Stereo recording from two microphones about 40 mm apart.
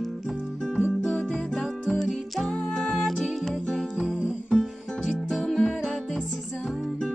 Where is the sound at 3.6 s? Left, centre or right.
Centre.